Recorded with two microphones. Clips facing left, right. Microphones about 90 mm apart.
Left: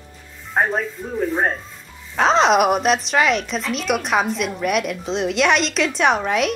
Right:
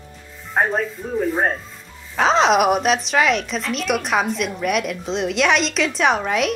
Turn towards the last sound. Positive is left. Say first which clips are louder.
# left 1 dB
turn(degrees=0)  # may be behind; listen again after turning